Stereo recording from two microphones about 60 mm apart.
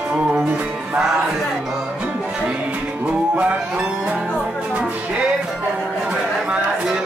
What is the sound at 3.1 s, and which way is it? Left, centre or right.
Music, centre.